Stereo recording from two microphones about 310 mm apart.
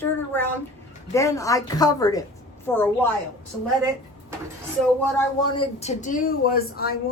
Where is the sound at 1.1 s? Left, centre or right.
Centre.